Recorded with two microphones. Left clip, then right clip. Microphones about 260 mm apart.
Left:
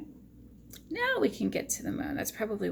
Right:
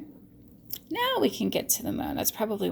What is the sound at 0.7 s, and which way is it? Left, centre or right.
A woman's voice, right.